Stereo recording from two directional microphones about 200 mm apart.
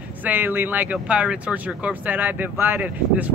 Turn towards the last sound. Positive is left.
turn(degrees=-10)  # may be behind; listen again after turning